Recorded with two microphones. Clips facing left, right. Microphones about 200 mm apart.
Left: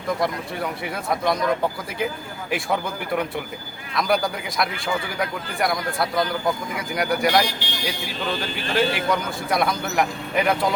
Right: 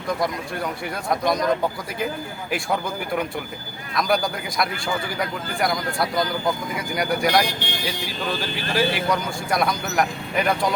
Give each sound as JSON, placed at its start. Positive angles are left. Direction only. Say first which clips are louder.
{"t": 0.2, "sound": "speech", "louder": "even", "side_deg": 0}
{"t": 3.9, "sound": "speech", "louder": "even", "side_deg": 0}